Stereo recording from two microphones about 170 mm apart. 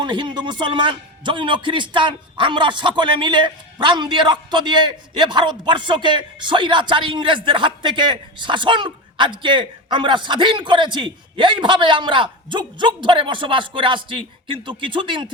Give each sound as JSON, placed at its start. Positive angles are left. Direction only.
{"t": 0.0, "sound": "a man's voice", "side_deg": -25}